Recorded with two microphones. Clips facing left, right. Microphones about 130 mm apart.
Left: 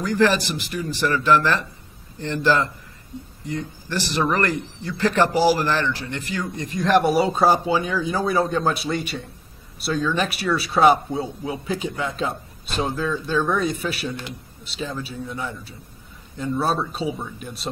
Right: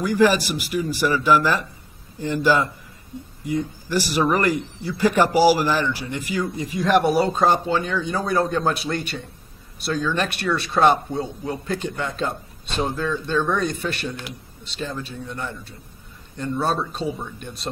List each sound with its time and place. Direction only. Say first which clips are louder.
0.0 s speech: right 2 dB; 10° right (ahead or behind)